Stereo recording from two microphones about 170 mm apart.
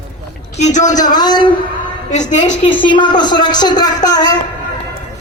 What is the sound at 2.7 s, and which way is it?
Speech, 30° left (ahead or behind).